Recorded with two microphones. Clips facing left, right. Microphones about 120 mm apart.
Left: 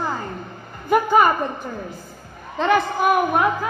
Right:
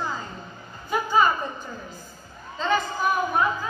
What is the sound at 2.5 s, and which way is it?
A woman's voice, 65° left (ahead or behind).